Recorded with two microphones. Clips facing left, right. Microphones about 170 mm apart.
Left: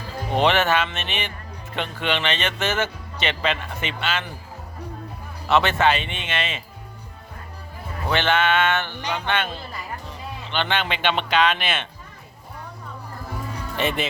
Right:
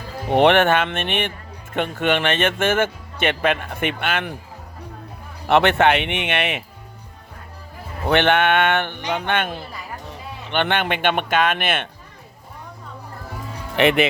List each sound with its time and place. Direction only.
0.3 s speech: 60° right (ahead or behind)
5.5 s speech: 60° right (ahead or behind)
8.1 s speech: 60° right (ahead or behind)
13.7 s speech: 70° right (ahead or behind)